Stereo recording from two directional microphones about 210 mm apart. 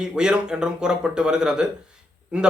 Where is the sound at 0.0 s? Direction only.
5° right (ahead or behind).